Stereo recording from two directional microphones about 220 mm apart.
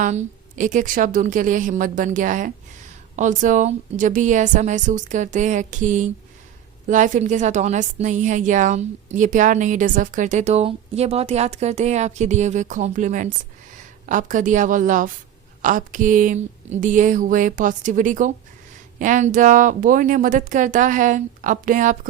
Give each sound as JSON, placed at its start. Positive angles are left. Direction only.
{"t": 0.0, "sound": "a woman's voice", "side_deg": -35}